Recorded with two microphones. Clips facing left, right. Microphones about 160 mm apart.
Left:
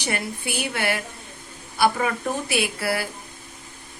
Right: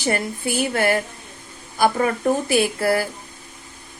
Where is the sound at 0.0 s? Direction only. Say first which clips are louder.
Right 5 dB; 40° right (ahead or behind).